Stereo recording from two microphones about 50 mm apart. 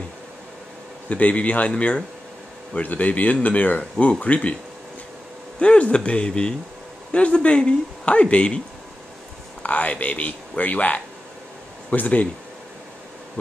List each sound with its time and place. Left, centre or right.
1.0 s speech: left
5.6 s speech: left
9.6 s speech: left